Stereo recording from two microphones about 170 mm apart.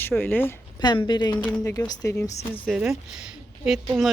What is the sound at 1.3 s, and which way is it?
Speech, 10° left (ahead or behind).